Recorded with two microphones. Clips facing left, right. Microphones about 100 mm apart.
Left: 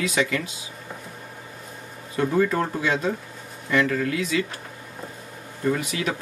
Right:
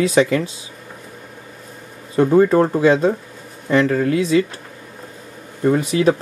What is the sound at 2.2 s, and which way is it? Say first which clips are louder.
Speech: right 9 dB; 30° right (ahead or behind).